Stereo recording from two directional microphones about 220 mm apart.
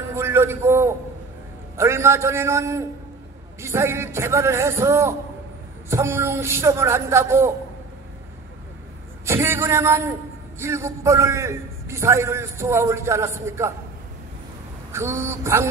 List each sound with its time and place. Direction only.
0.1 s a man's voice: 10° right (ahead or behind)
9.2 s a man's voice: 10° right (ahead or behind)
14.9 s a man's voice: 10° right (ahead or behind)